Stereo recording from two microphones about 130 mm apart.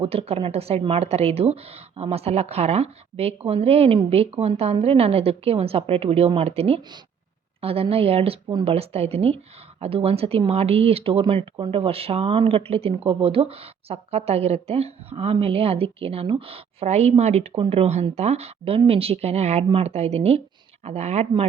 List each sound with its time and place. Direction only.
0.0 s speech: 50° right (ahead or behind)